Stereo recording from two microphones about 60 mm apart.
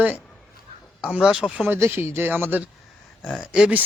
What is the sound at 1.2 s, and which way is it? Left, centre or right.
Speech, centre.